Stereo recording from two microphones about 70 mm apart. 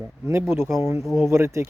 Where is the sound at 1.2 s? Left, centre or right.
Right.